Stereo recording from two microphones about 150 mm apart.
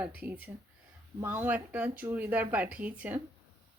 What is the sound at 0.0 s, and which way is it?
Speech, 10° right (ahead or behind).